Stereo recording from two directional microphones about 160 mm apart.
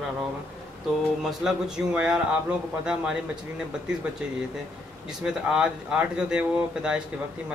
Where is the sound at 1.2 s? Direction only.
5° right (ahead or behind).